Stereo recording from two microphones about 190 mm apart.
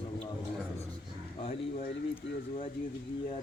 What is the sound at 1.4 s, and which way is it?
Speech, 35° left (ahead or behind).